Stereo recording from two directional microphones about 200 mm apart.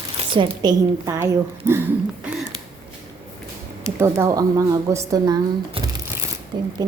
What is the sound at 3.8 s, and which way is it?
Speech, 15° right (ahead or behind).